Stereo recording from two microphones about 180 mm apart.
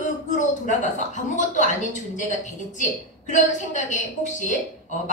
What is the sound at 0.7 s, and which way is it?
A woman's voice, 40° left (ahead or behind).